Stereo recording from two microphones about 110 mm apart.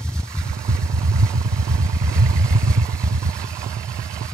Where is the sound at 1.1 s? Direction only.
25° right (ahead or behind).